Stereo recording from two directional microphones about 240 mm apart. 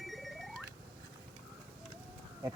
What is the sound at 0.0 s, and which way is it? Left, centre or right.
Alarm clock, centre.